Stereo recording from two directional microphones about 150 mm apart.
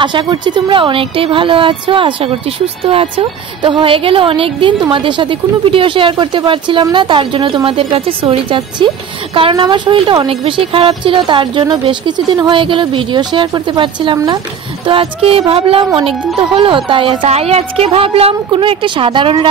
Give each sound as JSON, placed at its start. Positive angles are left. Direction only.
{"t": 0.0, "sound": "speech", "side_deg": -30}
{"t": 14.9, "sound": "speech", "side_deg": -40}